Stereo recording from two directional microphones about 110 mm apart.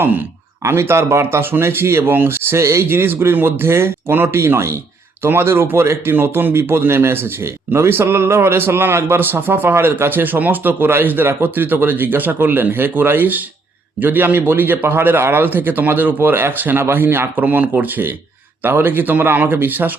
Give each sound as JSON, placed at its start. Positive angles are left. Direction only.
{"t": 0.6, "sound": "speech", "side_deg": -25}